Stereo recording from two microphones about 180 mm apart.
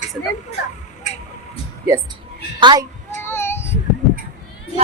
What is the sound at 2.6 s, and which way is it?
Speech, 25° right (ahead or behind).